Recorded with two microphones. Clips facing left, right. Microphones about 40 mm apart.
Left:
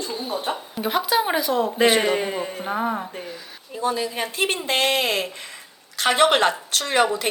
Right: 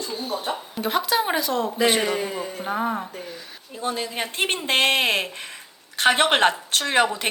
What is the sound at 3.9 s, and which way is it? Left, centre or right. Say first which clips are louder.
Speech: left 2 dB; right.